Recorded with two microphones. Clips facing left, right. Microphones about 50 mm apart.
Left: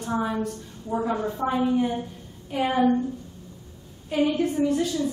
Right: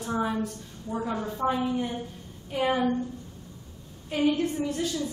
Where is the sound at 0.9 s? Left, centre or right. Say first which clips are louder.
Left 5 dB; centre.